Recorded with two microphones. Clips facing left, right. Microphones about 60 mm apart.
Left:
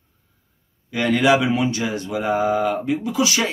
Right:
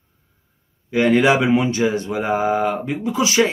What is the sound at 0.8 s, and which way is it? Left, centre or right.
Speech, right.